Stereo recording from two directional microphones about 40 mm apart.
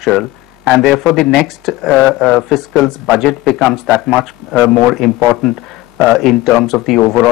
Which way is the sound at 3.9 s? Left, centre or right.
Right.